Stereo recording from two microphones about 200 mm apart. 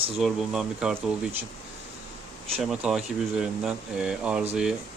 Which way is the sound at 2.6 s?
Centre (ahead or behind).